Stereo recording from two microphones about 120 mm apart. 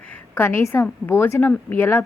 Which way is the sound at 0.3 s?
20° left (ahead or behind).